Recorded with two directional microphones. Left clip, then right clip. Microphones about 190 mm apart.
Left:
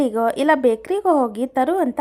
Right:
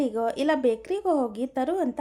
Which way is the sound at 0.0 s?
15° left (ahead or behind).